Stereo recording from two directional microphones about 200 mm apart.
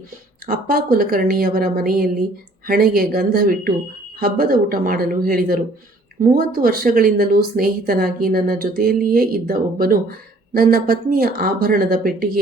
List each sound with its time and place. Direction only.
0.4 s speech: 45° right (ahead or behind)